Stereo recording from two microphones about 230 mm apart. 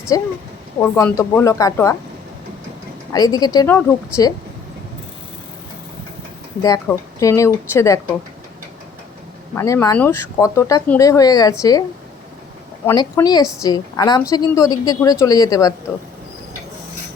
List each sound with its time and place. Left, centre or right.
0.1 s speech: centre
3.1 s speech: centre
6.6 s speech: centre
9.6 s speech: centre